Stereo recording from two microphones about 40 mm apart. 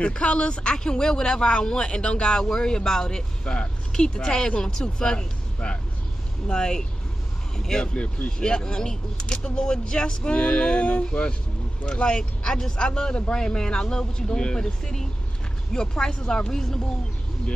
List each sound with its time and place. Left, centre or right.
0.0 s speech: left
7.8 s speech: left